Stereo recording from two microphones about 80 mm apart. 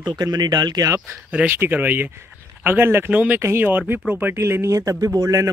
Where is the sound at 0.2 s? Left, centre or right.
Right.